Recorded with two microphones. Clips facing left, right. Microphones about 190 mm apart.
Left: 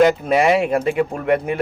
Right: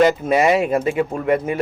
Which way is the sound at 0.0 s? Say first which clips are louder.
Left 1 dB; centre (ahead or behind).